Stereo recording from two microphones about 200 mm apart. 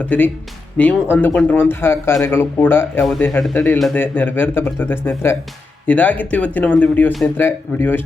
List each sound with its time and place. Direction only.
0.0 s speech: 10° left (ahead or behind)